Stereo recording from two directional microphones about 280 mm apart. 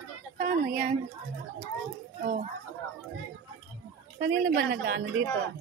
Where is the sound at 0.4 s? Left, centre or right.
Right.